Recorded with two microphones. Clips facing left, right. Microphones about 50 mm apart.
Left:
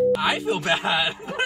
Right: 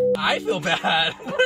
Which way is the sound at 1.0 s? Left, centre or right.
Left.